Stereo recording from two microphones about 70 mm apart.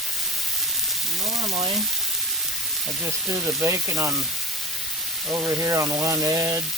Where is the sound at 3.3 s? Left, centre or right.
Right.